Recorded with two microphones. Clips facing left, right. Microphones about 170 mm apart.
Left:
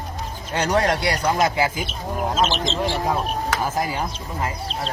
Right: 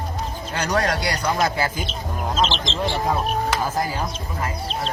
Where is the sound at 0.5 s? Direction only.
25° left (ahead or behind).